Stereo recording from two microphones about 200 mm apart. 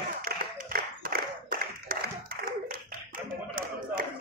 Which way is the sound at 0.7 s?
45° right (ahead or behind).